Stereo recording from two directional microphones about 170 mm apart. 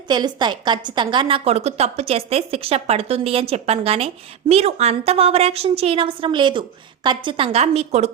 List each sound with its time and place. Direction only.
0.1 s a woman's voice: 25° right (ahead or behind)